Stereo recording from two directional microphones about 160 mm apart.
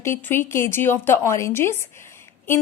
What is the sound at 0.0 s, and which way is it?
A woman's voice, 15° left (ahead or behind).